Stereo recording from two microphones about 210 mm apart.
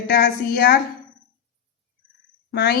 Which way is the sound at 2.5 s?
50° left (ahead or behind).